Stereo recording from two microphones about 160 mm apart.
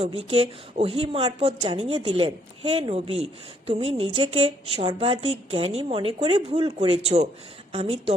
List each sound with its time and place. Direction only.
0.0 s a woman's voice: 40° right (ahead or behind)